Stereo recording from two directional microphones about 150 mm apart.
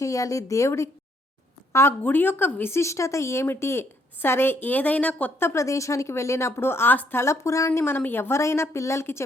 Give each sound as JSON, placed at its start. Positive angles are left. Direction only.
{"t": 0.0, "sound": "a woman's voice", "side_deg": 20}